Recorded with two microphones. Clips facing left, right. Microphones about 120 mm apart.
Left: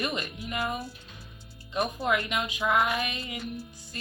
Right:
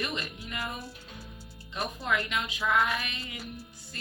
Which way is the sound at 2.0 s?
20° left (ahead or behind).